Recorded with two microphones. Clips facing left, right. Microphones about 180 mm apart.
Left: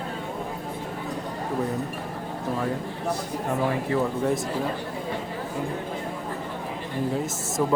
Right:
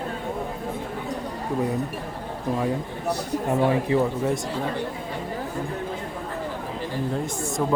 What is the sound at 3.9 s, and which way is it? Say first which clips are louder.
Speech: right 2 dB; 20° right (ahead or behind).